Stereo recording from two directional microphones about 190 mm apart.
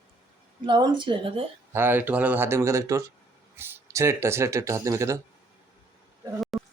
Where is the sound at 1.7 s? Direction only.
10° right (ahead or behind).